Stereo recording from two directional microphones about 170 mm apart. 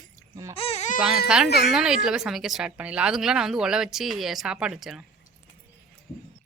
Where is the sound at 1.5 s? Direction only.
5° right (ahead or behind).